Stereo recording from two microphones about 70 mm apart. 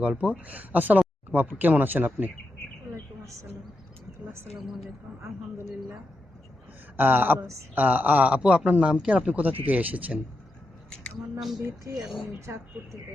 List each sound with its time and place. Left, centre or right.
0.0 s speech: centre
4.5 s speech: centre
6.9 s speech: right; by 9.2 s centre
9.2 s speech: right
11.3 s speech: centre
12.5 s a woman's voice: right